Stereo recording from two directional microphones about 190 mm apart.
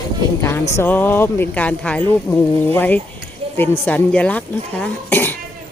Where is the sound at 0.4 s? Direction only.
15° left (ahead or behind).